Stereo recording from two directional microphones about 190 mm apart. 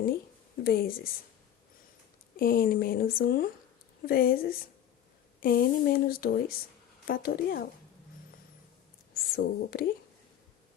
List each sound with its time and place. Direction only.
0.6 s speech: 50° left (ahead or behind)
2.3 s speech: 50° left (ahead or behind)
9.1 s speech: 50° left (ahead or behind)